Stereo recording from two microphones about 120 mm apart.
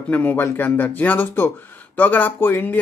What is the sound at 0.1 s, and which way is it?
Speech, 15° left (ahead or behind).